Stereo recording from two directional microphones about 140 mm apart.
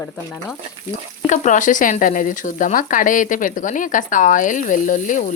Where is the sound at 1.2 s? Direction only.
60° left (ahead or behind).